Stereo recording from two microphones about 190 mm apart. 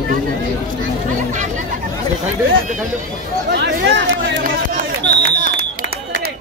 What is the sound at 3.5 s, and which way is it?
Speech, 65° right (ahead or behind).